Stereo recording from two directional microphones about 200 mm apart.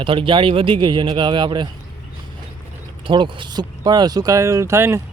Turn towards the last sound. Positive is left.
turn(degrees=-15)  # may be behind; listen again after turning